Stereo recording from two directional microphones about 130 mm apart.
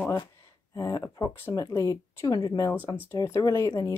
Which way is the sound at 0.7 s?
25° left (ahead or behind).